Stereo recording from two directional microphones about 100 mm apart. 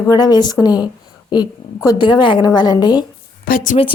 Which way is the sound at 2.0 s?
50° left (ahead or behind).